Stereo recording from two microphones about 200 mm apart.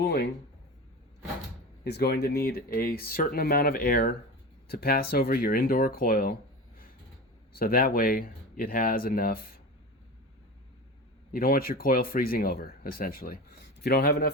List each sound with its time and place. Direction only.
0.0 s speech: 55° left (ahead or behind)
1.8 s speech: 55° left (ahead or behind)
7.5 s speech: 45° left (ahead or behind)
11.3 s speech: 45° left (ahead or behind)